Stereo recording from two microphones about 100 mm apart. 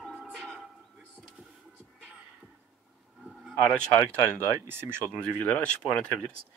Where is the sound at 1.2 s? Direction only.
5° right (ahead or behind).